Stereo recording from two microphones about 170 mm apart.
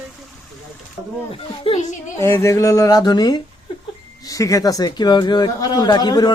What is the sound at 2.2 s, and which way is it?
A man's voice, 15° left (ahead or behind).